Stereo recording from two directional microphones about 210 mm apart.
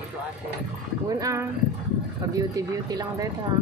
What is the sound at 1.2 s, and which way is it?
Speech, 15° right (ahead or behind).